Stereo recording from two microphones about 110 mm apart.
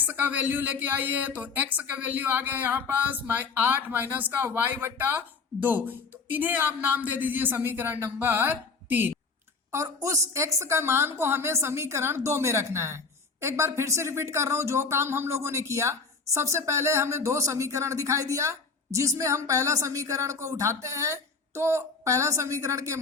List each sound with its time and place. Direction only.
0.0 s a woman's voice: 15° right (ahead or behind)
9.7 s speech: 30° right (ahead or behind)